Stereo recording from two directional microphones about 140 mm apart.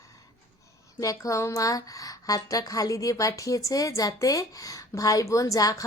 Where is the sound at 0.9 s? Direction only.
25° left (ahead or behind).